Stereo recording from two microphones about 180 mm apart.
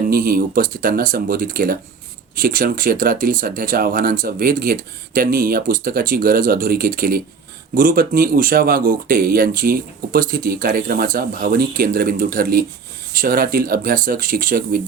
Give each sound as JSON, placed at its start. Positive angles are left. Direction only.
{"t": 0.1, "sound": "speech", "side_deg": -55}